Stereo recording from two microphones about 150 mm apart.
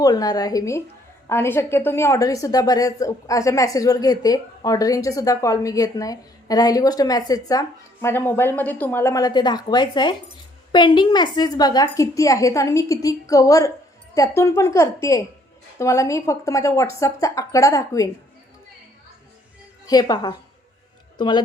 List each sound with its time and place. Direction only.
0.0 s a woman's voice: 25° left (ahead or behind)
19.8 s a woman's voice: 25° left (ahead or behind)